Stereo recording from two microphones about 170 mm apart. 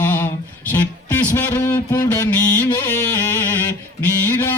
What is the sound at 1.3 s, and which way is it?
Speech, 10° left (ahead or behind).